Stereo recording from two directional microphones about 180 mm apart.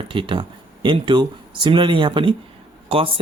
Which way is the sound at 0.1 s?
30° right (ahead or behind).